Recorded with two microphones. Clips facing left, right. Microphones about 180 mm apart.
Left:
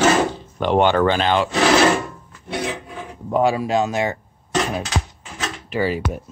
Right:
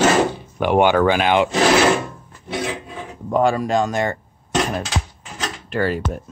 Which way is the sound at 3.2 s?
5° left (ahead or behind).